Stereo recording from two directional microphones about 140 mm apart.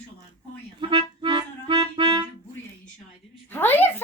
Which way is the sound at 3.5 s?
15° left (ahead or behind).